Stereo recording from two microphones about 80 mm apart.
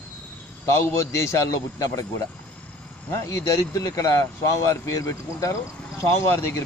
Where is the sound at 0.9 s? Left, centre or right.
Left.